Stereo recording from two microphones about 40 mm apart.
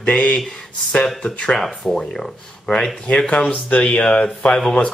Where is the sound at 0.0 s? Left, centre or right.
Left.